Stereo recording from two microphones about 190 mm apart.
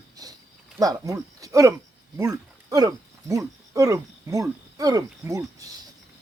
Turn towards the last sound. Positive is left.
turn(degrees=-15)  # may be behind; listen again after turning